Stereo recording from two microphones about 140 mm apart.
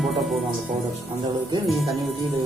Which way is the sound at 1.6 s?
Centre (ahead or behind).